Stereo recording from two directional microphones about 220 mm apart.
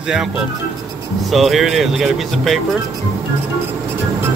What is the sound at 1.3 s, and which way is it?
Speech, centre (ahead or behind).